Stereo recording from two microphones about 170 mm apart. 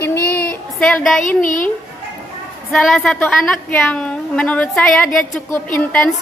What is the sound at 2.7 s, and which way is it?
A woman's voice, centre (ahead or behind).